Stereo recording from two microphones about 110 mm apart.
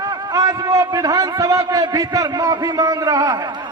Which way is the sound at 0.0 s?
35° right (ahead or behind).